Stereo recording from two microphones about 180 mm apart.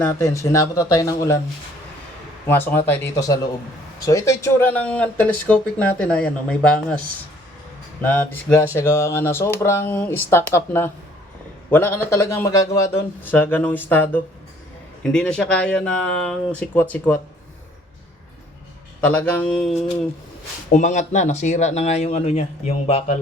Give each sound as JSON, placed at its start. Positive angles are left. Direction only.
{"t": 0.0, "sound": "speech", "side_deg": 15}
{"t": 2.5, "sound": "speech", "side_deg": 10}
{"t": 8.0, "sound": "speech", "side_deg": 10}
{"t": 19.0, "sound": "speech", "side_deg": 10}
{"t": 20.7, "sound": "speech", "side_deg": 45}